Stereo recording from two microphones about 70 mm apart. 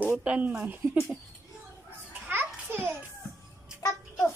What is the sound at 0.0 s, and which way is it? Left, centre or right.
Speech, right.